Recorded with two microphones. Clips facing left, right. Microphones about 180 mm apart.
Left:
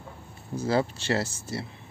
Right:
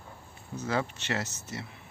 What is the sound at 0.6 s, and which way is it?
Speech, 30° left (ahead or behind).